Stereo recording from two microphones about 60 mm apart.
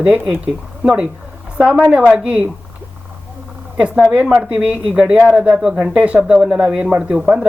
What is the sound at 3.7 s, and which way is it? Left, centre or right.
Speech, centre.